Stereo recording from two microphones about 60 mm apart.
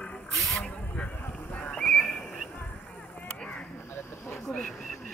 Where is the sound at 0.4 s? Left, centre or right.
Centre.